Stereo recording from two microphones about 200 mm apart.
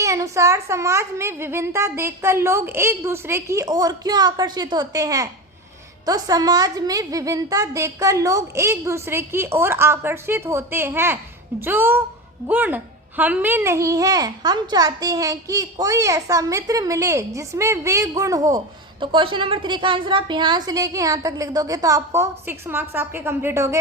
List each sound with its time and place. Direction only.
0.0 s a child's voice: 15° right (ahead or behind)